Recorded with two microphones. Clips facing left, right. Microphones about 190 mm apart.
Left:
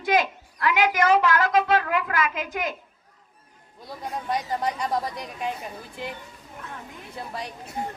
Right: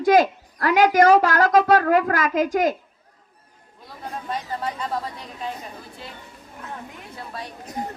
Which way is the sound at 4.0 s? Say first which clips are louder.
Left 2 dB; 15° left (ahead or behind).